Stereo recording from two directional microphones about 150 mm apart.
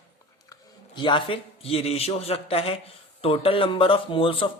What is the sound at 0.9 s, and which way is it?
A man's voice, 30° left (ahead or behind).